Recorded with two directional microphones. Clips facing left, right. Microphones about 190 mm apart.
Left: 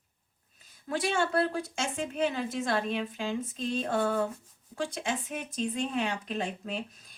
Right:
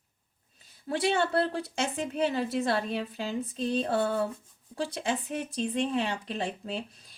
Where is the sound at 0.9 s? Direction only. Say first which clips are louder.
Right 2 dB; 35° right (ahead or behind).